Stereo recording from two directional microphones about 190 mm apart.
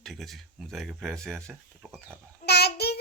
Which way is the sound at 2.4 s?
60° left (ahead or behind).